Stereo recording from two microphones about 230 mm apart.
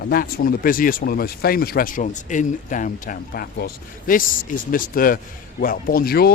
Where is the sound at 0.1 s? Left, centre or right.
Left.